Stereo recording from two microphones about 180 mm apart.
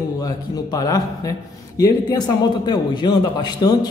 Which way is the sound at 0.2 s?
20° left (ahead or behind).